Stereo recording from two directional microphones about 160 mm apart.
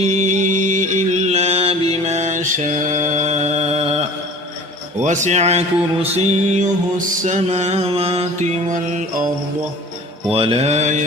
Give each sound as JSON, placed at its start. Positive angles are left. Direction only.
{"t": 0.3, "sound": "mantra", "side_deg": -50}
{"t": 5.0, "sound": "mantra", "side_deg": -50}
{"t": 8.7, "sound": "music", "side_deg": -55}
{"t": 10.3, "sound": "mantra", "side_deg": -40}